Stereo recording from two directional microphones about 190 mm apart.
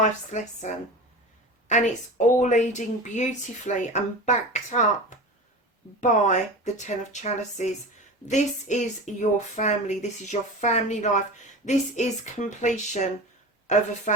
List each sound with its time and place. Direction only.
0.0 s a woman's voice: 40° left (ahead or behind)